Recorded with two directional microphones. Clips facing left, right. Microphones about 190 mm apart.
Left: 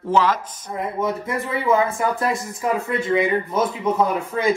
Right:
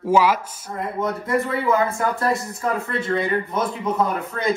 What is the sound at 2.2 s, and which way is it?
A man's voice, 10° left (ahead or behind).